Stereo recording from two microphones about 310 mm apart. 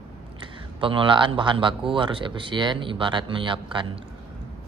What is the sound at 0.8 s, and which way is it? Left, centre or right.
Speech, centre.